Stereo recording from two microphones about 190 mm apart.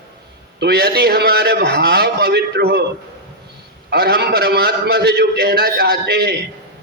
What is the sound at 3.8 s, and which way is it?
A man's voice, 55° right (ahead or behind).